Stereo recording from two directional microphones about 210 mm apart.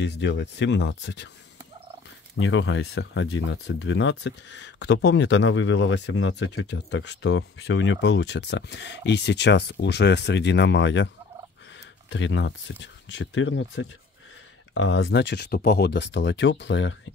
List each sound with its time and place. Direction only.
0.0 s speech: 55° left (ahead or behind)
2.3 s speech: 65° left (ahead or behind)
6.7 s speech: 55° left (ahead or behind)
7.2 s speech: 70° left (ahead or behind)
12.1 s speech: 60° left (ahead or behind)